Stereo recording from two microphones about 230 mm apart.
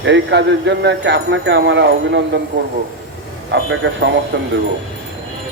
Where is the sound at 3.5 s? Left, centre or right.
Right.